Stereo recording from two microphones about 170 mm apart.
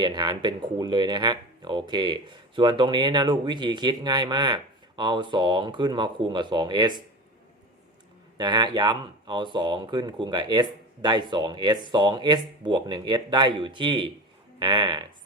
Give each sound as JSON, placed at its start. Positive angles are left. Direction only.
{"t": 0.0, "sound": "speech", "side_deg": -25}
{"t": 8.4, "sound": "speech", "side_deg": -25}